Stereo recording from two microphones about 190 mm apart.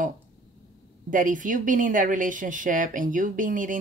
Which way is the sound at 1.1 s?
45° right (ahead or behind).